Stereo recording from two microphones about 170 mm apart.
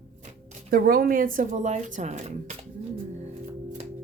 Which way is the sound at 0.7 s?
65° right (ahead or behind).